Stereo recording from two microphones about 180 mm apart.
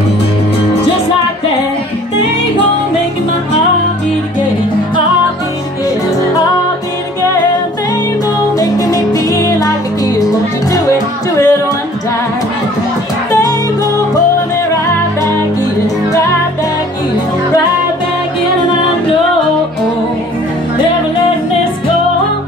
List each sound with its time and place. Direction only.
8.5 s music: 20° left (ahead or behind)